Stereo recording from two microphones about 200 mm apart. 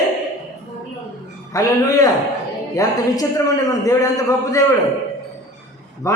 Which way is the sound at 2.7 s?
15° left (ahead or behind).